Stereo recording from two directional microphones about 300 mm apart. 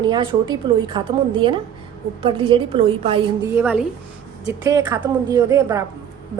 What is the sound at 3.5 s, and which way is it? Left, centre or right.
A woman's voice, centre.